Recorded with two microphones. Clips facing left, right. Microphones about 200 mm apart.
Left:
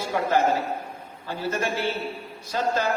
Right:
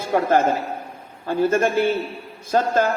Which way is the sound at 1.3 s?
50° right (ahead or behind).